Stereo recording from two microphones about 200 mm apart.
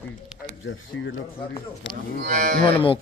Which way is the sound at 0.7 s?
75° left (ahead or behind).